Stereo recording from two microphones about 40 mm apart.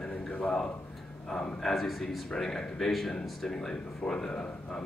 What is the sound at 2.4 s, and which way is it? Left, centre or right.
Speech, centre.